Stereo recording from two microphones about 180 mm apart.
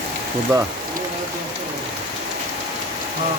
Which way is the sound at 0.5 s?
20° right (ahead or behind).